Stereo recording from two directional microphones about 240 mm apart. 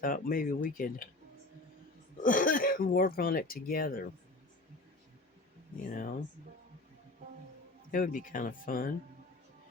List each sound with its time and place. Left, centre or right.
0.0 s speech: left
2.2 s speech: left
5.9 s speech: left
7.9 s speech: left